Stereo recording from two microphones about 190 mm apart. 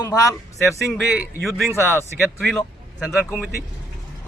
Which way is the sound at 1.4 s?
Centre (ahead or behind).